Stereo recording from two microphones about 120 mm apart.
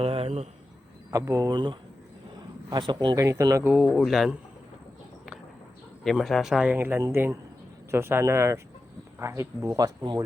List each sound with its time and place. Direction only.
0.0 s a sound: 55° right (ahead or behind)
1.1 s speech: 25° right (ahead or behind)
3.2 s speech: 25° right (ahead or behind)
3.7 s speech: centre (ahead or behind)
6.1 s speech: centre (ahead or behind)
6.7 s speech: 20° right (ahead or behind); by 10.2 s 35° right (ahead or behind)